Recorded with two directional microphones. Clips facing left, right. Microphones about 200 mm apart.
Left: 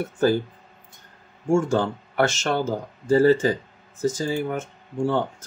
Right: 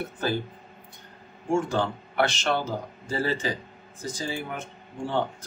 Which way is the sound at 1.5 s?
45° left (ahead or behind).